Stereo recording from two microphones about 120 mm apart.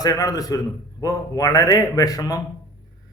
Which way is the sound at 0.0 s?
30° left (ahead or behind).